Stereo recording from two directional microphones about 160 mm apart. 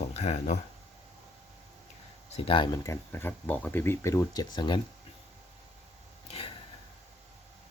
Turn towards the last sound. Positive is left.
turn(degrees=35)  # may be behind; listen again after turning